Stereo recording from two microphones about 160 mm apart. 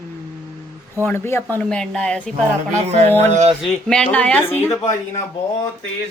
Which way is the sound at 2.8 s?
40° right (ahead or behind).